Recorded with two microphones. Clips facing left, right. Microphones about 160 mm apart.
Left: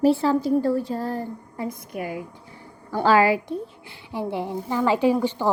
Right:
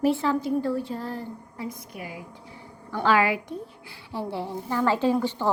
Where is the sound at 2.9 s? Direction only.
35° left (ahead or behind).